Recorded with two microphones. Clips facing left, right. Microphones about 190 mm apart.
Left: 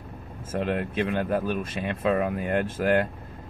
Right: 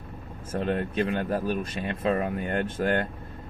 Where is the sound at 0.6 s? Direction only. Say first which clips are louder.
Even; 30° right (ahead or behind).